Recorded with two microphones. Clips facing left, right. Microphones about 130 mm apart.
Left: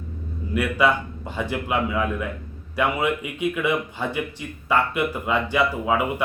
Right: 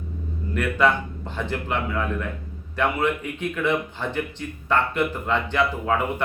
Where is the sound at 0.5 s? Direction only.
10° left (ahead or behind).